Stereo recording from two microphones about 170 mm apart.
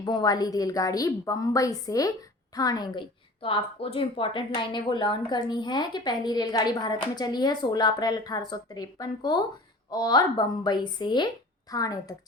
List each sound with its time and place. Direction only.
0.0 s a woman's voice: 25° left (ahead or behind)